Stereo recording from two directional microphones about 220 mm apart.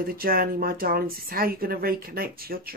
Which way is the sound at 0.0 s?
45° right (ahead or behind).